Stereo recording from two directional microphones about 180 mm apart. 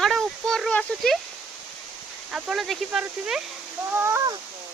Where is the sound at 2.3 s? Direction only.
5° right (ahead or behind).